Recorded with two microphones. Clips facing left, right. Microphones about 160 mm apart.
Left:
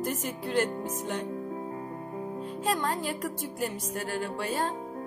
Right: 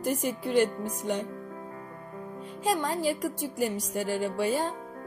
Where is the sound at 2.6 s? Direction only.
10° right (ahead or behind).